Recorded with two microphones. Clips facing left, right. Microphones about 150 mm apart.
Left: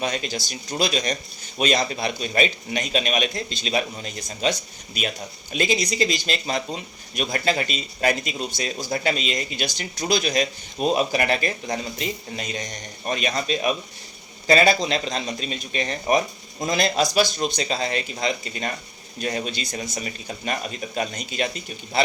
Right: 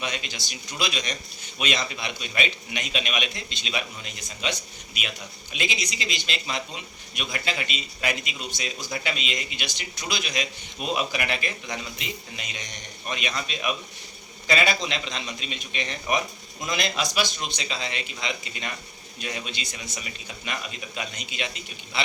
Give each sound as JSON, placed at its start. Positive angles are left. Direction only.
{"t": 0.0, "sound": "speech", "side_deg": 40}